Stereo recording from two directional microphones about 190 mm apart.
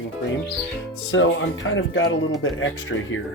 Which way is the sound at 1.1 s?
85° left.